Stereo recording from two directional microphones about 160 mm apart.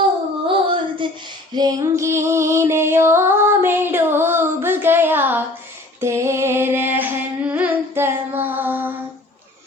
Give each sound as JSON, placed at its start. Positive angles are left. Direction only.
{"t": 0.4, "sound": "child singing", "side_deg": -30}
{"t": 1.5, "sound": "music", "side_deg": -25}
{"t": 6.0, "sound": "a sound", "side_deg": -15}